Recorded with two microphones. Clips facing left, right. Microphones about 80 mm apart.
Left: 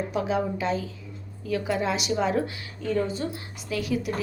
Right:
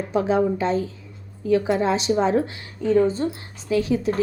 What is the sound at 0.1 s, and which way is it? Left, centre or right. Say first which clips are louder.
A woman's voice: right 11 dB; right.